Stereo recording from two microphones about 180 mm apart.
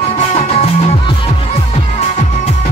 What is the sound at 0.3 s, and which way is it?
Music, 35° left (ahead or behind).